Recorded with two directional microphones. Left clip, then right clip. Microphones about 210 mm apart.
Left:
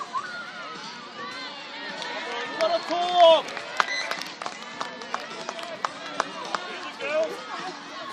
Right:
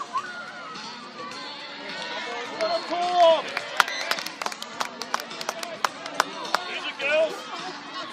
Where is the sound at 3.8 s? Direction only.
40° right (ahead or behind).